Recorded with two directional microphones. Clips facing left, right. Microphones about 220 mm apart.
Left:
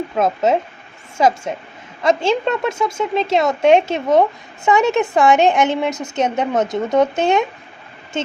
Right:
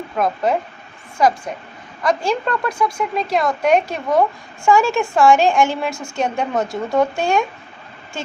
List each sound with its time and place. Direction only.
0.2 s a woman's voice: 25° left (ahead or behind)